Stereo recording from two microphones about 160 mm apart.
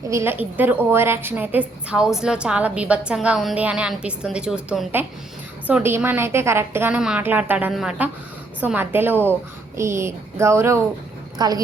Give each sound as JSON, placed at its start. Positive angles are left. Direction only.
{"t": 0.1, "sound": "a woman's voice", "side_deg": -15}